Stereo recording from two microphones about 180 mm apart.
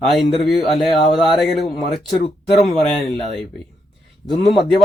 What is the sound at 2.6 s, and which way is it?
Speech, 35° left (ahead or behind).